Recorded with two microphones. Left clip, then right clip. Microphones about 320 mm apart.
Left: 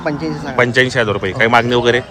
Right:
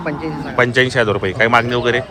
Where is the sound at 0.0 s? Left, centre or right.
Left.